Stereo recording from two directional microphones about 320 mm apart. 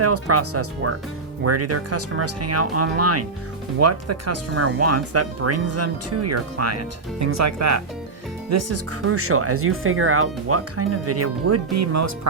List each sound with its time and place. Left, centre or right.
0.0 s speech: right